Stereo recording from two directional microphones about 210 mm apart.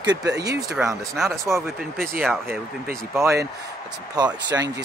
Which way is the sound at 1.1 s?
Centre (ahead or behind).